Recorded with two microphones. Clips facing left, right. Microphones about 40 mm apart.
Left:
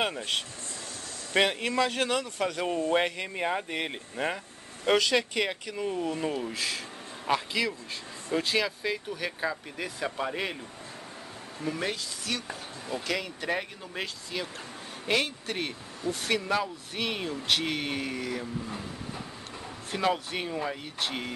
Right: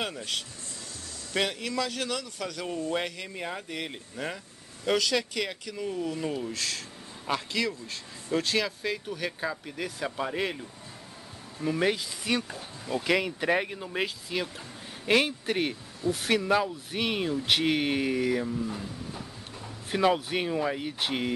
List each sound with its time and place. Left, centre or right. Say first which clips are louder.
0.0 s speech: left 3 dB; left; by 10.6 s centre
11.6 s speech: right 5 dB; centre
18.7 s a sound: right 1 dB; centre
19.9 s speech: right 3 dB; centre